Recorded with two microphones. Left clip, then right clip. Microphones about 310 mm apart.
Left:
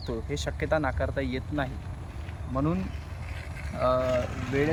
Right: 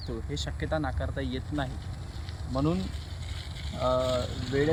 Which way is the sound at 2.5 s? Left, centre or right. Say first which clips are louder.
Even; centre.